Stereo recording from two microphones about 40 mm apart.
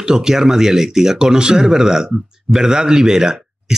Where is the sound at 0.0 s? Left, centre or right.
Centre.